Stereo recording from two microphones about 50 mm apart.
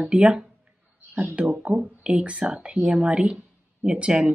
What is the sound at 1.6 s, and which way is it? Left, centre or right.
Speech, centre.